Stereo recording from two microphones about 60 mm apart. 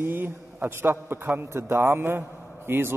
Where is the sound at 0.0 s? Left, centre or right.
Right.